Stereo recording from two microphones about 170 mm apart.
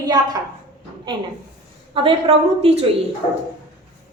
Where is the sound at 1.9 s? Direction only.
30° right (ahead or behind).